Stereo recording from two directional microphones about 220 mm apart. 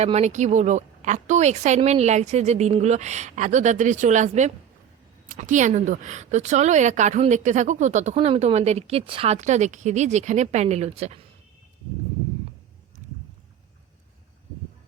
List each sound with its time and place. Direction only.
0.0 s speech: 30° right (ahead or behind)